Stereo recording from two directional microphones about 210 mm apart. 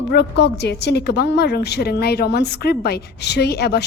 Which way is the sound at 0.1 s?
55° left (ahead or behind).